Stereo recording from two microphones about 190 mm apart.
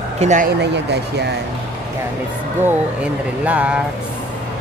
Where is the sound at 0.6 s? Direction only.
60° right (ahead or behind).